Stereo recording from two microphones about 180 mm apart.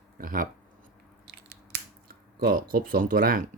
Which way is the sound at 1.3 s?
65° right (ahead or behind).